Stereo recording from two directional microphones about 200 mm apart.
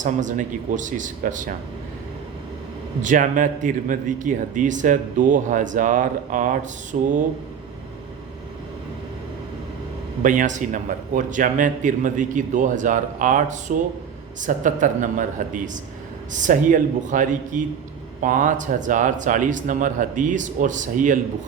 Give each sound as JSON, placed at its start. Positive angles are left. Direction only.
{"t": 0.0, "sound": "speech", "side_deg": -40}
{"t": 3.0, "sound": "speech", "side_deg": -40}
{"t": 10.2, "sound": "speech", "side_deg": -40}